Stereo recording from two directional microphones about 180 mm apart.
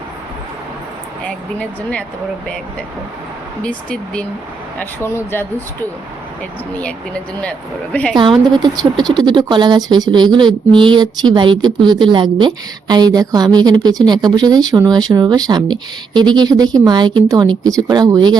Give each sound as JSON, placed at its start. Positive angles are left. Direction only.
{"t": 1.5, "sound": "speech", "side_deg": 5}
{"t": 3.6, "sound": "speech", "side_deg": 5}
{"t": 6.7, "sound": "speech", "side_deg": 5}
{"t": 8.1, "sound": "a woman's voice", "side_deg": -25}